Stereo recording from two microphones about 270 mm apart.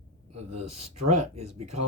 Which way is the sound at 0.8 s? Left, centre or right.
Right.